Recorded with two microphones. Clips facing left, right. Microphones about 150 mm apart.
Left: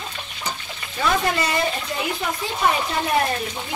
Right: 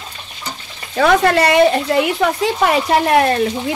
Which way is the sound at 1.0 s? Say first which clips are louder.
Right 9 dB; 75° right (ahead or behind).